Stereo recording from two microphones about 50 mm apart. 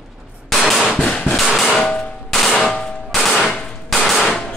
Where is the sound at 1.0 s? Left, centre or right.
Left.